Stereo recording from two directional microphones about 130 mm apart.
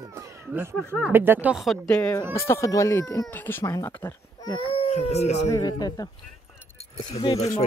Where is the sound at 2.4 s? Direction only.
20° left (ahead or behind).